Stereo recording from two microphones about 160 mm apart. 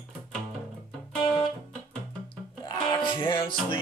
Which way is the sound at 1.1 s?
5° left (ahead or behind).